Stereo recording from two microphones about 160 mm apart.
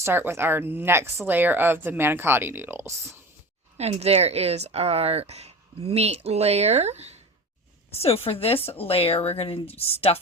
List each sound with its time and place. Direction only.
0.0 s a woman's voice: 15° right (ahead or behind)
3.8 s a woman's voice: 40° right (ahead or behind)
7.9 s speech: 40° left (ahead or behind)